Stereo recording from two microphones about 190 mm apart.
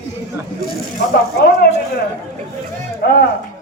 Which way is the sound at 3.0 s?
60° left (ahead or behind).